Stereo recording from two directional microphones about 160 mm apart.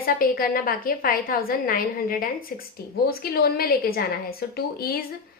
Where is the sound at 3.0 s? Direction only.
75° left (ahead or behind).